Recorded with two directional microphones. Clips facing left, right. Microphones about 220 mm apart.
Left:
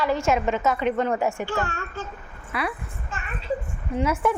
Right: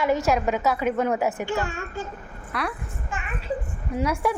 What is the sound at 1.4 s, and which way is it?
Speech, 15° right (ahead or behind).